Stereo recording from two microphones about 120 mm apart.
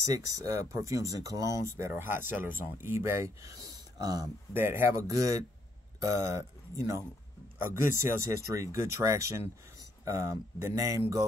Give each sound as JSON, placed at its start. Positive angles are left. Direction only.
{"t": 0.0, "sound": "speech", "side_deg": -30}
{"t": 4.6, "sound": "speech", "side_deg": -20}